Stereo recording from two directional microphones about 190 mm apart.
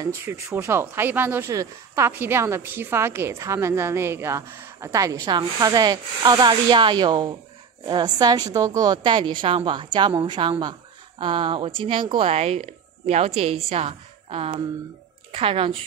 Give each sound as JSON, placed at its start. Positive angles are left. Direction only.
{"t": 0.0, "sound": "a woman's voice", "side_deg": -15}